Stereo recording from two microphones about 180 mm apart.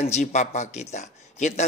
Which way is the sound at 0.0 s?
40° left (ahead or behind).